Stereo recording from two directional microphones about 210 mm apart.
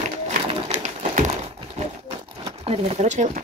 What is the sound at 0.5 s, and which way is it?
Bird, 30° right (ahead or behind).